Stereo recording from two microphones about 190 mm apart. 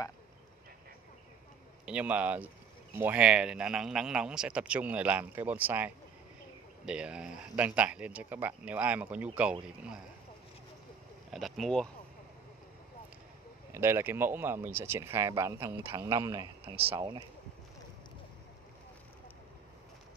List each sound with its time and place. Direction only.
1.9 s speech: 5° right (ahead or behind)
11.3 s speech: centre (ahead or behind)
13.7 s speech: 15° right (ahead or behind)